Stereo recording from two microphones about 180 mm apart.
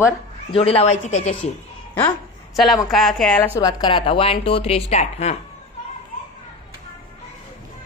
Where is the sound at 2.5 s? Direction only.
Centre (ahead or behind); by 5.3 s 35° left (ahead or behind).